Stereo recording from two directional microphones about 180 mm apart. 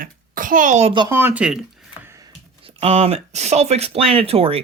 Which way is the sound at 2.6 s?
35° right (ahead or behind).